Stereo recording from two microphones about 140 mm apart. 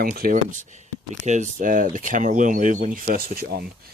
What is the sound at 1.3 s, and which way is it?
Speech, 65° right (ahead or behind).